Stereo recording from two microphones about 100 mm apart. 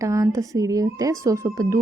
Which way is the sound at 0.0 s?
30° right (ahead or behind).